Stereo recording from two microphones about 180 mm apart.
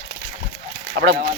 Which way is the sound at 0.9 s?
60° right (ahead or behind).